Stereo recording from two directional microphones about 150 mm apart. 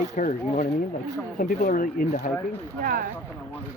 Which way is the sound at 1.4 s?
65° left (ahead or behind).